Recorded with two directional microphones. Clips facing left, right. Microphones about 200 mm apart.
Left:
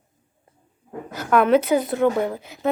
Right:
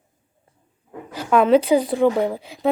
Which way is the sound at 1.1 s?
30° right (ahead or behind).